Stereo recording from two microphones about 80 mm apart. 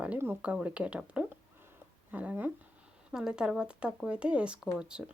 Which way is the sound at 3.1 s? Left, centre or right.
Centre.